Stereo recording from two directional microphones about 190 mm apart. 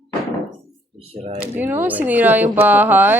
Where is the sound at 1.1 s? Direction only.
35° right (ahead or behind).